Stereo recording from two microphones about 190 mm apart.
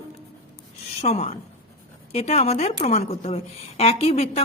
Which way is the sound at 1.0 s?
35° left (ahead or behind).